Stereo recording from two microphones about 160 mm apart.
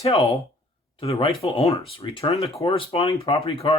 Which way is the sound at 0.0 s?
40° left (ahead or behind).